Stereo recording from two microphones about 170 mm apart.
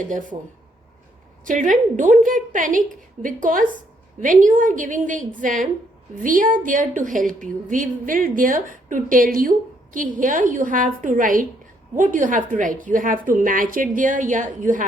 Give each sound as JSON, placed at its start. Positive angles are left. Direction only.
{"t": 0.1, "sound": "a woman's voice", "side_deg": -50}
{"t": 1.5, "sound": "a woman's voice", "side_deg": -50}